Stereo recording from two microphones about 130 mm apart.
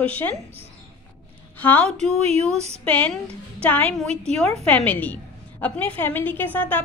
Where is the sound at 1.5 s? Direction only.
15° left (ahead or behind).